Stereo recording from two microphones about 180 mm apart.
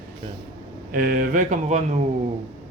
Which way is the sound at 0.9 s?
55° right (ahead or behind).